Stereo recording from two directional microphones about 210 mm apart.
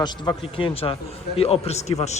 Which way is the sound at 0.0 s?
20° left (ahead or behind).